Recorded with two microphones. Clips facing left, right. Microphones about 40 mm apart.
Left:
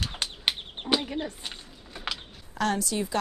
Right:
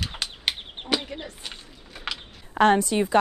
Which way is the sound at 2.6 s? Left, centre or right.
Right.